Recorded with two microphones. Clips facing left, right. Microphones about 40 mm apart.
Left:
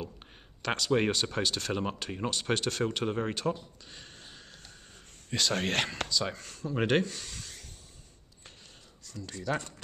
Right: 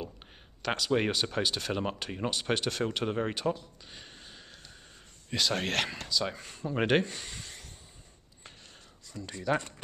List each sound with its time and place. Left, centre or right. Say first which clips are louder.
0.6 s speech: left 1 dB; centre
3.9 s a sound: right 1 dB; centre
5.3 s speech: even; centre
6.3 s speech: right 1 dB; centre
9.0 s speech: right 2 dB; centre